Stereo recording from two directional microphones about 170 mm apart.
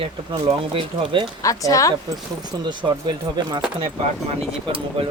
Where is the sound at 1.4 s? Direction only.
20° left (ahead or behind).